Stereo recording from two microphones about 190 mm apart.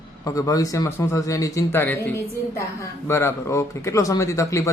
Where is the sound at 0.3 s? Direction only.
20° left (ahead or behind).